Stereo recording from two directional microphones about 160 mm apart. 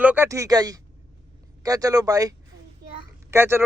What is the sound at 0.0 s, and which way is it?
Speech, 10° right (ahead or behind).